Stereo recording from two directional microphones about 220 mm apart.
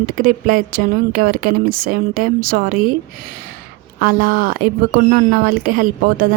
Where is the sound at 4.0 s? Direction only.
40° right (ahead or behind).